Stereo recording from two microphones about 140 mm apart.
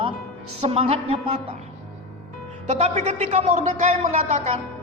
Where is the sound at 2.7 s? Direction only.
60° right (ahead or behind).